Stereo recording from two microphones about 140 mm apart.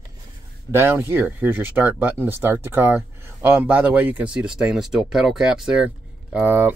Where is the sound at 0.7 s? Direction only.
15° right (ahead or behind).